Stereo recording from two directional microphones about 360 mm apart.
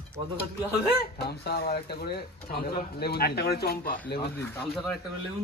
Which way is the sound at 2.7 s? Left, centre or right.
Left.